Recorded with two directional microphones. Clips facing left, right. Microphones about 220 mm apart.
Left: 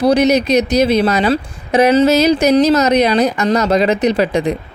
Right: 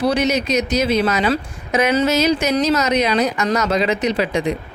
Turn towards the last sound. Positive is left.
turn(degrees=35)  # may be behind; listen again after turning